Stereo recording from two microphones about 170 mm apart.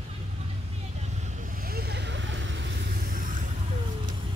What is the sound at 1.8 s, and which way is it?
Vehicle, 75° right (ahead or behind).